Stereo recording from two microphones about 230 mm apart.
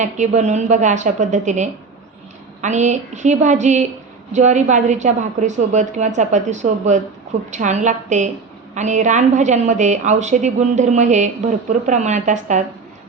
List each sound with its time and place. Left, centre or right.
0.0 s a woman's voice: right